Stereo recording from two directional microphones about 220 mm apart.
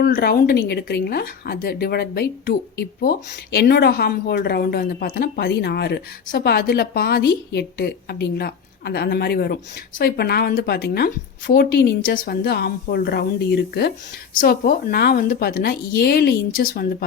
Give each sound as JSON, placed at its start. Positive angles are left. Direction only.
{"t": 0.0, "sound": "a woman's voice", "side_deg": 40}